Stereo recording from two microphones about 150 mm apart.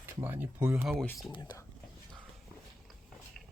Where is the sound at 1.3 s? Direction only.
30° left (ahead or behind).